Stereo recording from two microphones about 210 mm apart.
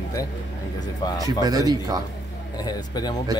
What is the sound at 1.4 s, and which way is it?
Speech, 15° right (ahead or behind).